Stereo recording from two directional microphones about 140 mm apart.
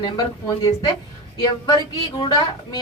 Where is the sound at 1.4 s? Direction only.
30° left (ahead or behind).